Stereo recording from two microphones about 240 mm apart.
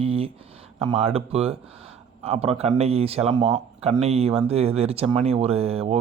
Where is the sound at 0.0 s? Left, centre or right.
Right.